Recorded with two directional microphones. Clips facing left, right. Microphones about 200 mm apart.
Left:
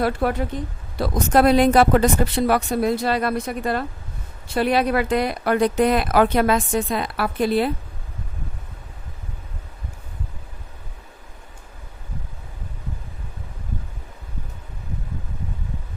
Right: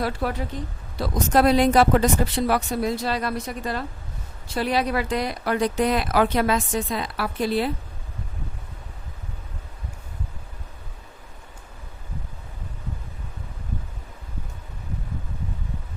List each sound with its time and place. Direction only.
0.0 s speech: 55° left (ahead or behind)